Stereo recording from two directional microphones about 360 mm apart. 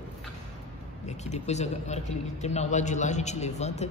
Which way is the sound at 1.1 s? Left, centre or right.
Centre.